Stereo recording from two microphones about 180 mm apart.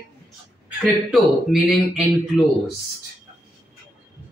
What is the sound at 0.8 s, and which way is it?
A man's voice, centre (ahead or behind).